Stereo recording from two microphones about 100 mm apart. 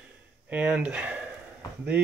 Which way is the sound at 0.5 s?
15° right (ahead or behind).